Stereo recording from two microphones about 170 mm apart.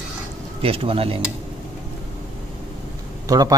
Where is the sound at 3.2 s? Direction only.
20° right (ahead or behind).